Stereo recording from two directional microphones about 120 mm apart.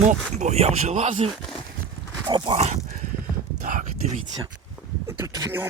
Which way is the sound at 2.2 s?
45° right (ahead or behind).